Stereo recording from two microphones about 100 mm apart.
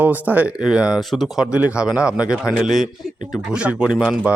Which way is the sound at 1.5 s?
10° right (ahead or behind).